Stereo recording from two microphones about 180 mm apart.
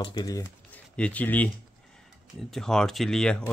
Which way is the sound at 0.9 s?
5° left (ahead or behind).